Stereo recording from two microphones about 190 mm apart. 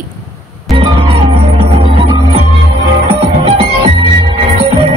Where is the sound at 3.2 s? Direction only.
30° right (ahead or behind).